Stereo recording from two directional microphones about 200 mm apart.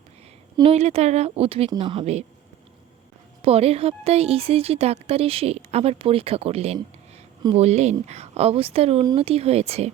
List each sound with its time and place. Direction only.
0.5 s speech: 30° right (ahead or behind)
3.4 s speech: 30° right (ahead or behind)